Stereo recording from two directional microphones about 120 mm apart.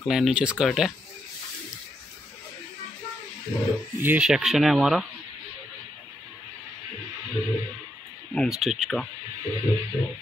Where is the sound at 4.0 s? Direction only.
15° right (ahead or behind).